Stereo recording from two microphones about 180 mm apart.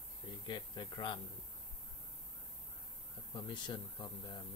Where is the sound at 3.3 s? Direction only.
25° left (ahead or behind).